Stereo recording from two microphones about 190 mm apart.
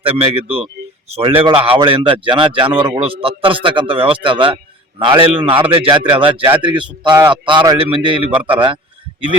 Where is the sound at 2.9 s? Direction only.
30° right (ahead or behind).